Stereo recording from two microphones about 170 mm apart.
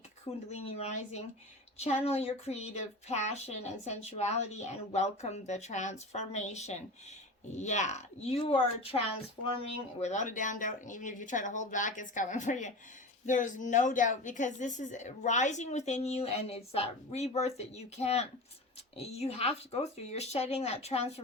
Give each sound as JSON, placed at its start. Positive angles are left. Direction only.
{"t": 0.5, "sound": "a woman's voice", "side_deg": 40}